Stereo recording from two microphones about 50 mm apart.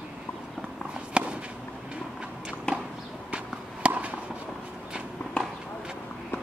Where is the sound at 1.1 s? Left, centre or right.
Right.